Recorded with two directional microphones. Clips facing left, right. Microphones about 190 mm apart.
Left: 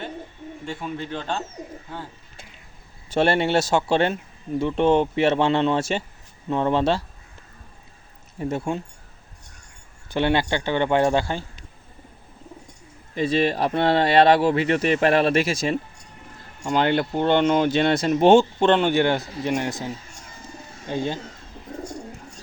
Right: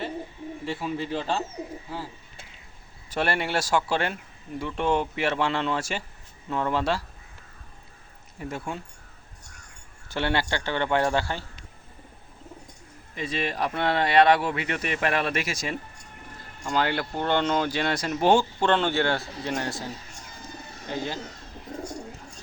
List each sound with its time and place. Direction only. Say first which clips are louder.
0.6 s speech: right 1 dB; 5° right (ahead or behind)
3.1 s speech: left 7 dB; 25° left (ahead or behind)
8.4 s speech: left 7 dB; 25° left (ahead or behind)
10.1 s a man's voice: left 5 dB; 20° left (ahead or behind)
13.1 s speech: left 8 dB; 30° left (ahead or behind)